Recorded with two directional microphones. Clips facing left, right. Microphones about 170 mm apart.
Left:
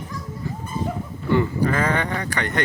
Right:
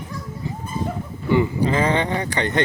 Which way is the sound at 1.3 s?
20° right (ahead or behind).